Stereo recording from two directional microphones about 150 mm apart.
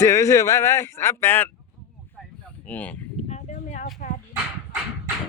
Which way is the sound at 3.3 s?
50° left (ahead or behind).